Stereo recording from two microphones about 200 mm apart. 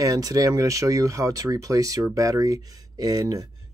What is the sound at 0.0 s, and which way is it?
Speech, 15° right (ahead or behind).